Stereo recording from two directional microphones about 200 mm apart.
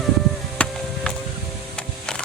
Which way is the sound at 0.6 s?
5° left (ahead or behind).